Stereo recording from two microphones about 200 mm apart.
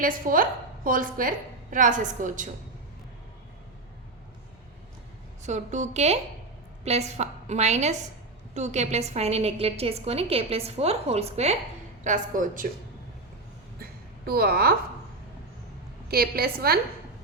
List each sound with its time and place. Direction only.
0.0 s a woman's voice: 45° right (ahead or behind)
5.4 s a woman's voice: 35° right (ahead or behind)
14.3 s a woman's voice: 50° right (ahead or behind)
16.0 s a woman's voice: 50° right (ahead or behind)